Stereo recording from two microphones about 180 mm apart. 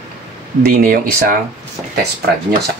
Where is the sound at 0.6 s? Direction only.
55° right (ahead or behind).